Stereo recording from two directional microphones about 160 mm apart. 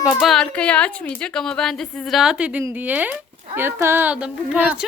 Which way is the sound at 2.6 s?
10° right (ahead or behind).